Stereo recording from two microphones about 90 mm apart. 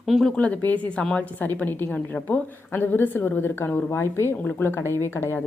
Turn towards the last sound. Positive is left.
turn(degrees=25)  # may be behind; listen again after turning